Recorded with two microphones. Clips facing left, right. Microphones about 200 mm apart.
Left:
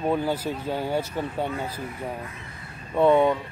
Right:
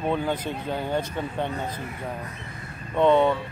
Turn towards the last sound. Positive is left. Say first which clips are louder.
# even
turn(degrees=10)  # may be behind; listen again after turning